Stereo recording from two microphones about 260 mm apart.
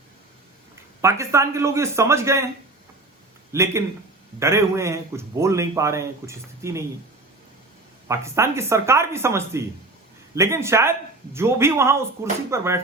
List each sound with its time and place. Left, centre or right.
1.0 s a man's voice: centre
3.5 s a man's voice: centre
8.0 s a man's voice: centre